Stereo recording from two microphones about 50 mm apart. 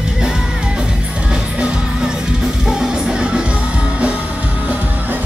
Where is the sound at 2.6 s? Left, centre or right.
Centre.